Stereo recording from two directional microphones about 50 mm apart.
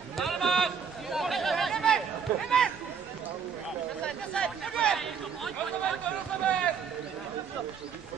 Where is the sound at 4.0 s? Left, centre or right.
Centre.